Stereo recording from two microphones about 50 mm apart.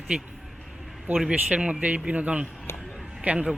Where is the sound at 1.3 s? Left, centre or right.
Right.